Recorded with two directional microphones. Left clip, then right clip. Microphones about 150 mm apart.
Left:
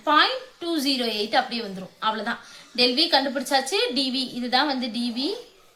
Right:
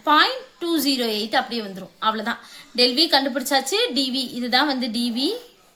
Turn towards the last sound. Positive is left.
turn(degrees=-50)  # may be behind; listen again after turning